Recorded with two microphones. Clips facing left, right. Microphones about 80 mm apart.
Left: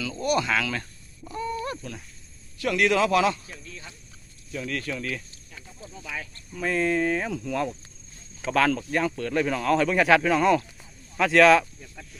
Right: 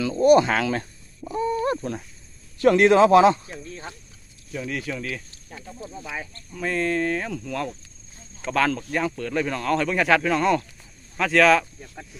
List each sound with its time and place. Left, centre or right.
0.0 s a sound: right
2.6 s a man's voice: right
4.5 s speech: centre
5.5 s snake: right
6.0 s a man's voice: right
6.5 s speech: centre
11.6 s speech: right